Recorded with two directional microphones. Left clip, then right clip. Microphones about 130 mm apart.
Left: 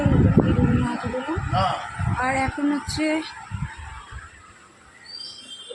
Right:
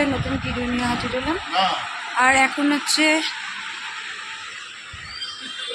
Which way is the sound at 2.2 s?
10° right (ahead or behind).